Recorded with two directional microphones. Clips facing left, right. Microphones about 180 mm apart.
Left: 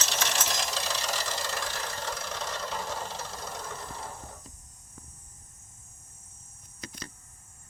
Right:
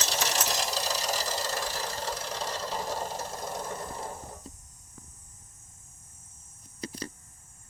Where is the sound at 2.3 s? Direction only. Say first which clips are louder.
Right 1 dB; 35° right (ahead or behind).